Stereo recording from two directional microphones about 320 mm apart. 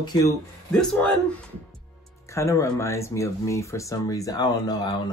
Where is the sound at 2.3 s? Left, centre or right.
Centre.